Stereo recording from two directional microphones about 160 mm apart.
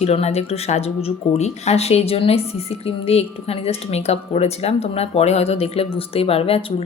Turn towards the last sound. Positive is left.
turn(degrees=35)  # may be behind; listen again after turning